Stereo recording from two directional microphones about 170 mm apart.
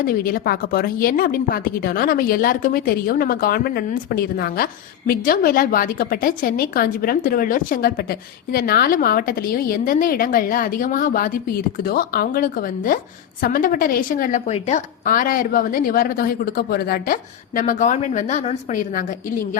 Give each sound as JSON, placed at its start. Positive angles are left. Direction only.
{"t": 0.0, "sound": "a woman's voice", "side_deg": 60}